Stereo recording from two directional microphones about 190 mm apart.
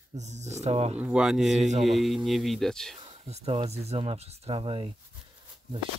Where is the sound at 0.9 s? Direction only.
5° right (ahead or behind).